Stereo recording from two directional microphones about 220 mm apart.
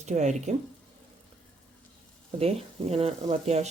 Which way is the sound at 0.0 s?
30° right (ahead or behind).